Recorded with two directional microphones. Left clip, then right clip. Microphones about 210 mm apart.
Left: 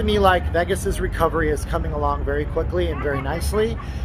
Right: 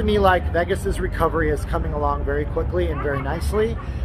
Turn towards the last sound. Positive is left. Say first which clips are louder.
# even
turn(degrees=20)  # may be behind; listen again after turning